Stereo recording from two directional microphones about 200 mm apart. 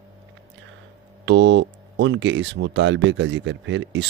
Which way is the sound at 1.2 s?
65° right (ahead or behind).